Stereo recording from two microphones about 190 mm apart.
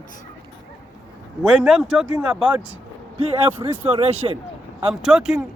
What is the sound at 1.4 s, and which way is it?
Speech, 5° right (ahead or behind).